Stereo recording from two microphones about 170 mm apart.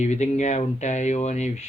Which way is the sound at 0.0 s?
40° left (ahead or behind).